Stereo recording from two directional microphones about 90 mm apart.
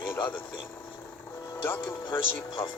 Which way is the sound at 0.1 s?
20° left (ahead or behind).